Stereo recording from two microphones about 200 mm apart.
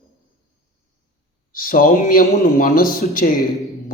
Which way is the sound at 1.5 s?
45° left (ahead or behind).